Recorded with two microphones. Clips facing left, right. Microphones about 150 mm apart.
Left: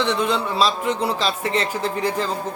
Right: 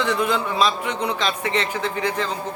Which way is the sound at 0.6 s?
35° left (ahead or behind).